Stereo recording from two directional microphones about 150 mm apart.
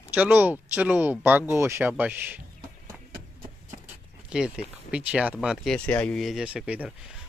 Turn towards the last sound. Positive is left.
turn(degrees=-10)  # may be behind; listen again after turning